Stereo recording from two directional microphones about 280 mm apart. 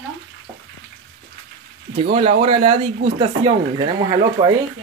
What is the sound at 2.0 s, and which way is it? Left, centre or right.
Speech, right.